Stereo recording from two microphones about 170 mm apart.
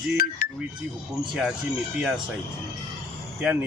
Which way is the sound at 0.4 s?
60° left (ahead or behind).